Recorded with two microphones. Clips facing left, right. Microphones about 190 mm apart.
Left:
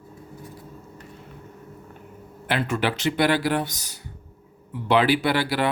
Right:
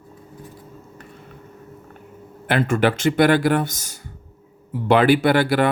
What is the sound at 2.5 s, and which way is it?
Speech, 50° right (ahead or behind).